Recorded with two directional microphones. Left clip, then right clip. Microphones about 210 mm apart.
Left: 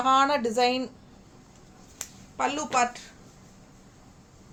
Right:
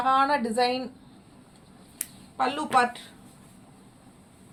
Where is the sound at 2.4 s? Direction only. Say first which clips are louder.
Right 2 dB; 25° left (ahead or behind).